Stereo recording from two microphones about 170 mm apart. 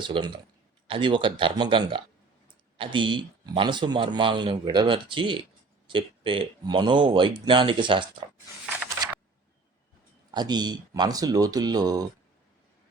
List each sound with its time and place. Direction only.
0.0 s a man's voice: 30° right (ahead or behind)
10.3 s a man's voice: 25° right (ahead or behind)